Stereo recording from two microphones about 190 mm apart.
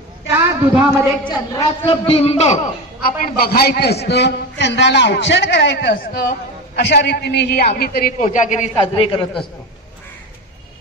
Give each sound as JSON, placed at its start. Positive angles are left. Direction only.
{"t": 0.3, "sound": "a sound", "side_deg": -15}
{"t": 1.2, "sound": "a woman's voice", "side_deg": 20}
{"t": 1.9, "sound": "a man's voice", "side_deg": 30}
{"t": 3.0, "sound": "a man's voice", "side_deg": 55}
{"t": 8.2, "sound": "a man's voice", "side_deg": 40}